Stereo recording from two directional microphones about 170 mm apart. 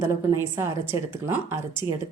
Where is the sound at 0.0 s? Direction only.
15° right (ahead or behind).